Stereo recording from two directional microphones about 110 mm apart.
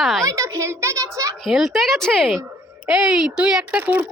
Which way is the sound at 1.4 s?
Centre (ahead or behind).